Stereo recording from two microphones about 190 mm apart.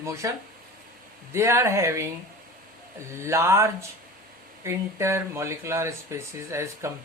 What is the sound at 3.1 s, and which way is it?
Speech, 15° right (ahead or behind).